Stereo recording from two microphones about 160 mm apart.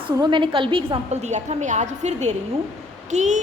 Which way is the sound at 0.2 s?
30° right (ahead or behind).